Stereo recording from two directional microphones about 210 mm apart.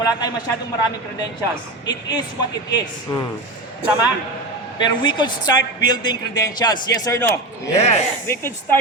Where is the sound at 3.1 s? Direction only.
20° left (ahead or behind).